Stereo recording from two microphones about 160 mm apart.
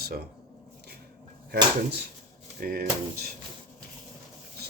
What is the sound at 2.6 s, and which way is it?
Speech, 70° right (ahead or behind).